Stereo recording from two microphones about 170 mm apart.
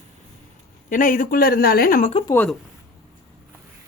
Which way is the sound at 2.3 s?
10° left (ahead or behind).